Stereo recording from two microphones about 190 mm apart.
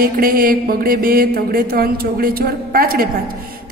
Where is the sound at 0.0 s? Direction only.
50° right (ahead or behind).